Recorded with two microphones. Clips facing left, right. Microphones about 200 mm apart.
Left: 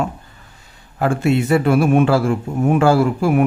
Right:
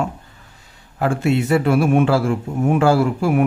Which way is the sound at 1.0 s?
50° left (ahead or behind).